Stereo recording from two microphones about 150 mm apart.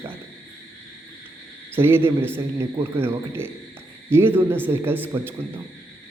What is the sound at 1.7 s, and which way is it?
A man's voice, 15° right (ahead or behind).